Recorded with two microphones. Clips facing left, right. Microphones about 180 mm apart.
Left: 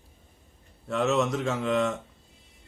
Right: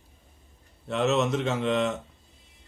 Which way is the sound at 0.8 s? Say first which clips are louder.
Right 1 dB; centre (ahead or behind).